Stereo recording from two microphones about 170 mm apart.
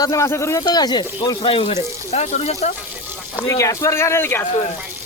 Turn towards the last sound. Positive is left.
turn(degrees=15)  # may be behind; listen again after turning